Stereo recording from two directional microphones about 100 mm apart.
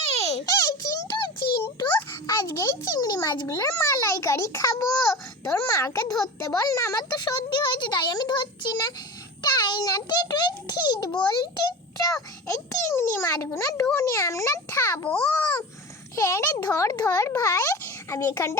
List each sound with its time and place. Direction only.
0.1 s a sound: 90° left
0.4 s music: 35° left (ahead or behind)
2.2 s a child's voice: 40° left (ahead or behind)
12.5 s a child's voice: 30° left (ahead or behind)
15.1 s a child's voice: 10° left (ahead or behind)
16.1 s a child's voice: 30° left (ahead or behind)